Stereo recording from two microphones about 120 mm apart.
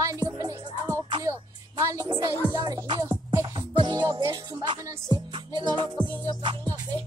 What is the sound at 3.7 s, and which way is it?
Music, 40° right (ahead or behind).